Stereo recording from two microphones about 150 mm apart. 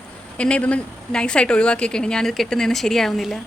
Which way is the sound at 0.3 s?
5° left (ahead or behind).